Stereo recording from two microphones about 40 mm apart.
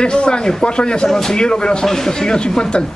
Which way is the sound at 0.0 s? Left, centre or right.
Left.